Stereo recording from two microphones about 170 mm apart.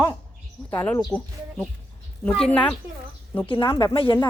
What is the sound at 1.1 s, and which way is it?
Speech, 5° left (ahead or behind).